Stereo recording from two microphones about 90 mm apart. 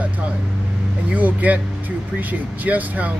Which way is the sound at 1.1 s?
20° right (ahead or behind).